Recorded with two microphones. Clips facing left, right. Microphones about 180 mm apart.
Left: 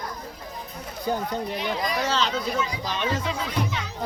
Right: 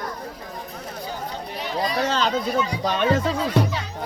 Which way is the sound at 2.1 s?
50° right (ahead or behind).